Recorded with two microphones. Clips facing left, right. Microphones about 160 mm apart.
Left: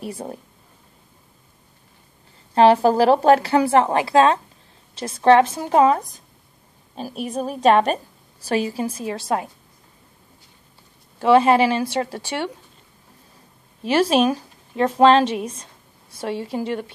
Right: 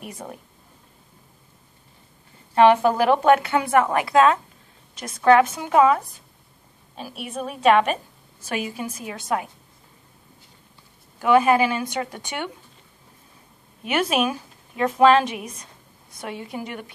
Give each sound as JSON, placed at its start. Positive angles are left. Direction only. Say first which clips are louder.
{"t": 0.0, "sound": "a woman's voice", "louder": "left 6 dB", "side_deg": 30}
{"t": 2.5, "sound": "a woman's voice", "louder": "left 2 dB", "side_deg": 35}
{"t": 11.1, "sound": "a woman's voice", "louder": "left 3 dB", "side_deg": 30}
{"t": 13.8, "sound": "speech", "louder": "left 5 dB", "side_deg": 30}